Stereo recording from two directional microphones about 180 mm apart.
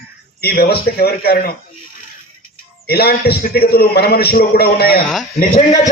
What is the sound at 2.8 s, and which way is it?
A man's voice, 60° left (ahead or behind).